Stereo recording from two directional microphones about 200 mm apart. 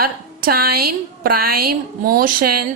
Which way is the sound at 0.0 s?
50° right (ahead or behind).